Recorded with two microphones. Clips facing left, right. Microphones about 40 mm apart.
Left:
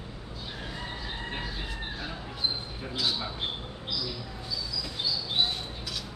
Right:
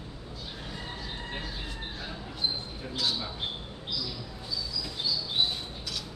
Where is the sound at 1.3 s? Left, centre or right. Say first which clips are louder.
Left 2 dB; centre.